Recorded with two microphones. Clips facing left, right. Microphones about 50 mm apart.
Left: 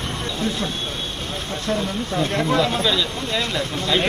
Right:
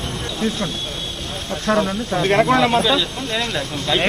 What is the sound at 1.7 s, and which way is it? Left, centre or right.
Speech, right.